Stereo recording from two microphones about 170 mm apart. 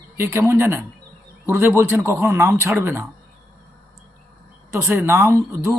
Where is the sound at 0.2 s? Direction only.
15° right (ahead or behind).